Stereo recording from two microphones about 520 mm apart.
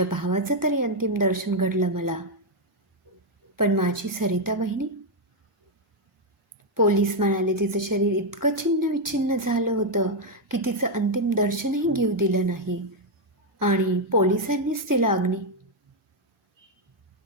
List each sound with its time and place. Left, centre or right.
0.2 s a woman's voice: right
3.6 s a woman's voice: right
6.8 s a woman's voice: right